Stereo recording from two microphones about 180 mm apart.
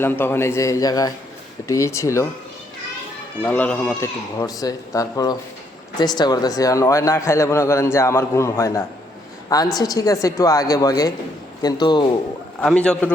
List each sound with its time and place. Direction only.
0.0 s a man's voice: 10° left (ahead or behind)
3.4 s a man's voice: 10° left (ahead or behind)
12.6 s a man's voice: 5° left (ahead or behind)